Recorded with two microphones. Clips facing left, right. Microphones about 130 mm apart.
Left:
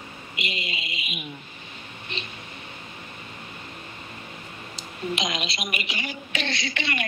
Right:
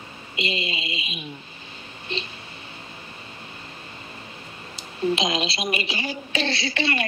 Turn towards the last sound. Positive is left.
turn(degrees=-30)  # may be behind; listen again after turning